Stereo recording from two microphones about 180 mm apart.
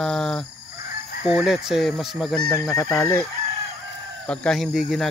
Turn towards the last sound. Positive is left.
turn(degrees=0)  # may be behind; listen again after turning